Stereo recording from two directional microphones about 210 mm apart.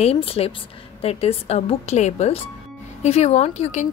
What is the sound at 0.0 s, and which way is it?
A woman's voice, 30° left (ahead or behind).